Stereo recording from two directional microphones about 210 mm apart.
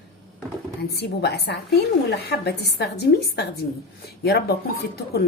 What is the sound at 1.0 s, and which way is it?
A woman's voice, 50° left (ahead or behind).